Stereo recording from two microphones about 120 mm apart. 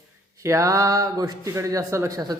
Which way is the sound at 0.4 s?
25° right (ahead or behind).